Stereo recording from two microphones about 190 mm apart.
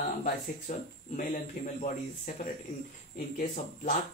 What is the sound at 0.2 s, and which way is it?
Speech, 45° left (ahead or behind).